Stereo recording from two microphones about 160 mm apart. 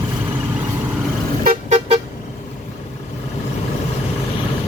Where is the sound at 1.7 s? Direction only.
40° right (ahead or behind).